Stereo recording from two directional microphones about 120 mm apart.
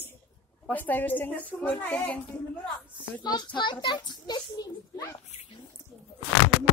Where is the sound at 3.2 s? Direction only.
35° left (ahead or behind).